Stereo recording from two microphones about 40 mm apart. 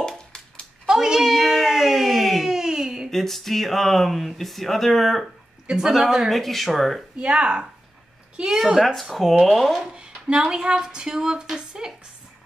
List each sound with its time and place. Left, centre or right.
0.8 s a sound: centre
1.3 s cat: centre
2.4 s a sound: centre
3.1 s speech: centre
7.2 s speech: right
8.5 s a woman's voice: centre
8.7 s speech: centre
9.9 s speech: right